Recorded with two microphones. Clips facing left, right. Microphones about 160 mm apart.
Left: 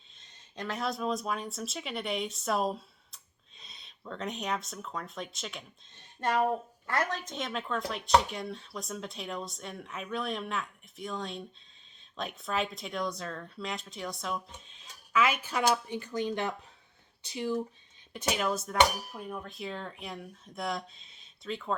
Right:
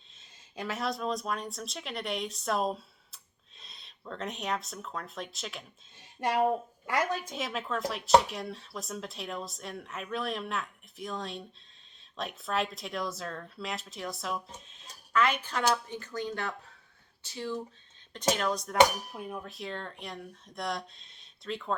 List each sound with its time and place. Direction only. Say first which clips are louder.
0.2 s speech: right 1 dB; 5° right (ahead or behind)
6.1 s a woman's voice: right 1 dB; 15° right (ahead or behind)